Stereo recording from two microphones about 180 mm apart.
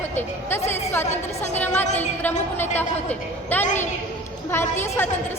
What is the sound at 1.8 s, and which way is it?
Speech, 40° left (ahead or behind).